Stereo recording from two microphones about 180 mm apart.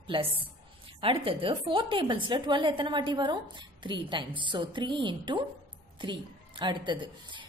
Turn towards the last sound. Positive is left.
turn(degrees=-25)  # may be behind; listen again after turning